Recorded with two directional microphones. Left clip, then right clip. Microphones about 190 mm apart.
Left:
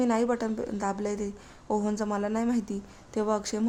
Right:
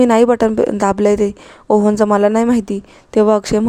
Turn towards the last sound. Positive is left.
turn(degrees=-40)  # may be behind; listen again after turning